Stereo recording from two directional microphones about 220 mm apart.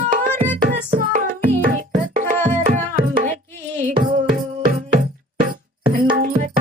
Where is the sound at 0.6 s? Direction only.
35° right (ahead or behind).